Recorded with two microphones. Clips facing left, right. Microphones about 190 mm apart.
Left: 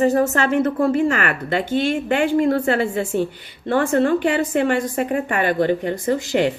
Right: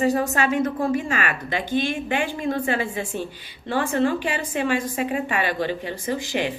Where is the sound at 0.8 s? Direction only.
60° left (ahead or behind).